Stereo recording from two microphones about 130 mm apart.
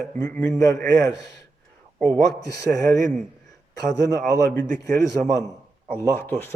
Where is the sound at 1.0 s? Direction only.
30° left (ahead or behind).